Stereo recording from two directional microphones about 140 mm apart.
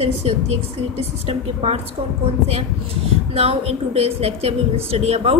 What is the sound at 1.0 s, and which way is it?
Speech, 45° right (ahead or behind).